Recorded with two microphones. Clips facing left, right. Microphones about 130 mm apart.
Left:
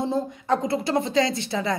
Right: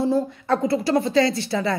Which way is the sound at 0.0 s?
20° left (ahead or behind).